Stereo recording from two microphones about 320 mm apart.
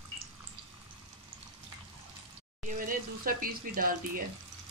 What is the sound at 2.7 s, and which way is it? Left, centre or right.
Speech, right.